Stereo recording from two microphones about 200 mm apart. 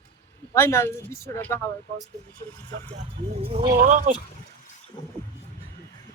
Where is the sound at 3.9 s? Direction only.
40° right (ahead or behind).